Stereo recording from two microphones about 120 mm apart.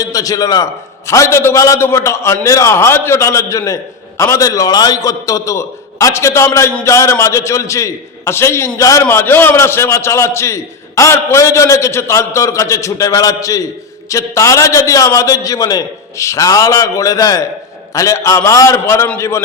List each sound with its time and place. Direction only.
0.0 s a man's voice: 30° left (ahead or behind)